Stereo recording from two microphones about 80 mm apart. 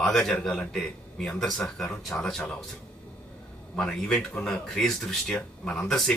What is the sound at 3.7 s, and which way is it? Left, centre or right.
Speech, centre.